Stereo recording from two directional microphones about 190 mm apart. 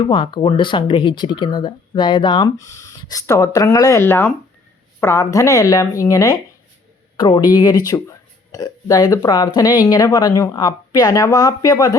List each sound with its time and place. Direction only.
0.1 s speech: 25° left (ahead or behind)